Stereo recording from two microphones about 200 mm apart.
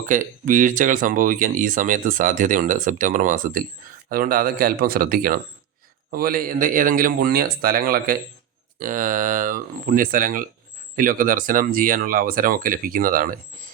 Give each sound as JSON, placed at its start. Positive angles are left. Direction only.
{"t": 0.0, "sound": "speech", "side_deg": -40}